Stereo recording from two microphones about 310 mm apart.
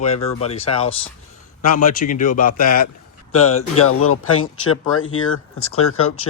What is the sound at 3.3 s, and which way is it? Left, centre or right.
Speech, left.